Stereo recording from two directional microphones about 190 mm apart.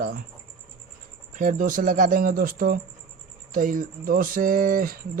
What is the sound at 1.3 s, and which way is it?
A man's voice, 45° right (ahead or behind).